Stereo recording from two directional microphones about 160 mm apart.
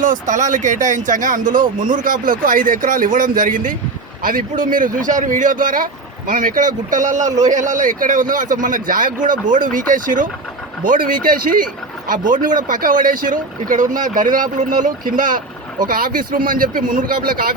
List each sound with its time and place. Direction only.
0.0 s speech: 55° right (ahead or behind)